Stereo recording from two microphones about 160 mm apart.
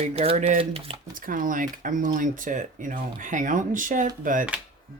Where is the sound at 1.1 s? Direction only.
55° right (ahead or behind).